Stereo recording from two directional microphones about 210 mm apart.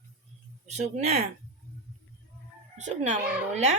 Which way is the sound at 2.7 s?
35° right (ahead or behind).